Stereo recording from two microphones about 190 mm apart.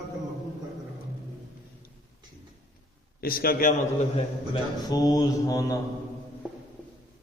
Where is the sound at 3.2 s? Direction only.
50° left (ahead or behind).